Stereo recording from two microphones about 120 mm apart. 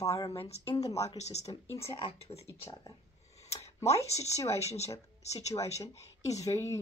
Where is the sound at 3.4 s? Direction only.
60° left (ahead or behind).